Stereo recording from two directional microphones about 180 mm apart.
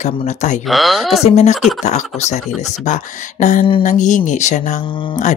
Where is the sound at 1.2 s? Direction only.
40° left (ahead or behind).